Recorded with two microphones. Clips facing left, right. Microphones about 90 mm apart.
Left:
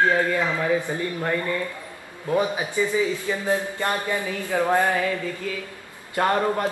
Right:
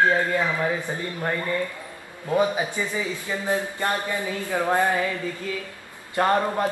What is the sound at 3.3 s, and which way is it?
A man's voice, 20° right (ahead or behind).